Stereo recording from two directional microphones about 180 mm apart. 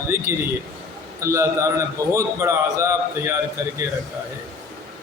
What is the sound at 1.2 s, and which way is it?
A man's voice, 15° right (ahead or behind).